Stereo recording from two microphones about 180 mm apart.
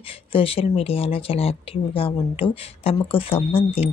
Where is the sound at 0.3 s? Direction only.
30° left (ahead or behind).